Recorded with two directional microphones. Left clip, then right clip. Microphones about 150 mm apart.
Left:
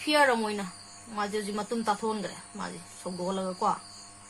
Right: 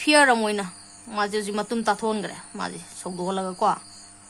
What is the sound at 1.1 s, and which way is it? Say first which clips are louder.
A woman's voice: right 6 dB; 70° right (ahead or behind).